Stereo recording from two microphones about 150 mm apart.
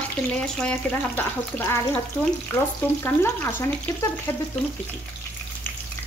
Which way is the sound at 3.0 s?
15° left (ahead or behind).